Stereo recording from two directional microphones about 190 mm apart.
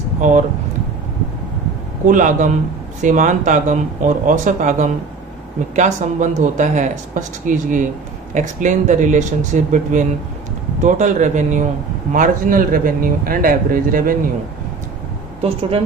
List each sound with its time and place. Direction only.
0.2 s speech: 40° right (ahead or behind)
2.0 s a man's voice: 45° right (ahead or behind)